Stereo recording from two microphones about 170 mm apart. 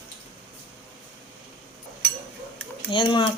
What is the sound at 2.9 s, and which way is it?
Speech, 30° left (ahead or behind).